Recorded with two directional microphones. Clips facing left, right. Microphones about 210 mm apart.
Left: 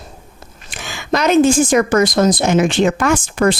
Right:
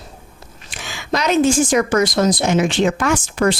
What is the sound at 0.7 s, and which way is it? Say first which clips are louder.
A woman's voice: left 3 dB; 50° left (ahead or behind).